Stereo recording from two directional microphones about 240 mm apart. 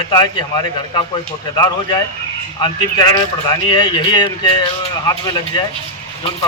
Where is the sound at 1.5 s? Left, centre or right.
Centre.